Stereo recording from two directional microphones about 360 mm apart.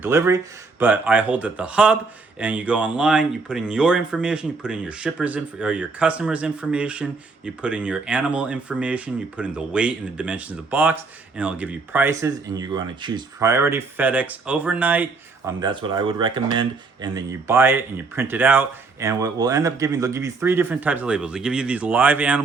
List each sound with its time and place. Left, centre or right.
0.0 s speech: centre